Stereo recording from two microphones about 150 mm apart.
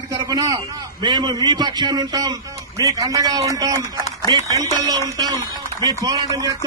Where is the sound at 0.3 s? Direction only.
25° right (ahead or behind).